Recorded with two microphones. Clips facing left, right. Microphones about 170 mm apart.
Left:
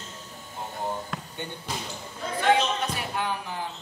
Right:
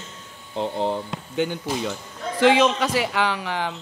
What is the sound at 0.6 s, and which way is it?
Speech, 90° right.